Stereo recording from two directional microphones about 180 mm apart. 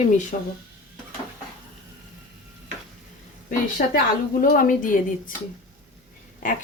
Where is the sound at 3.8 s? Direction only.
50° left (ahead or behind).